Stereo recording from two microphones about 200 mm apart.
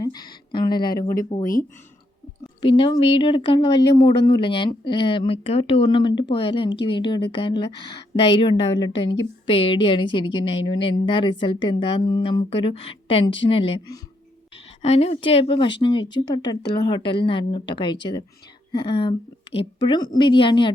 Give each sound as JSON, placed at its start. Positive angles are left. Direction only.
{"t": 0.0, "sound": "speech", "side_deg": 20}
{"t": 2.6, "sound": "speech", "side_deg": 25}